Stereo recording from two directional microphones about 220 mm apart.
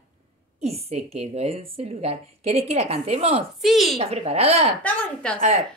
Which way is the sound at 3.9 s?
30° right (ahead or behind).